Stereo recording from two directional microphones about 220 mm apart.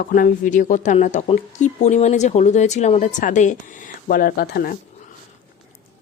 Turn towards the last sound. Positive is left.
turn(degrees=45)  # may be behind; listen again after turning